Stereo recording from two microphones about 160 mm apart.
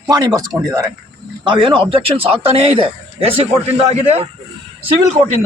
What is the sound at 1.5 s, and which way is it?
A man's voice, 30° right (ahead or behind).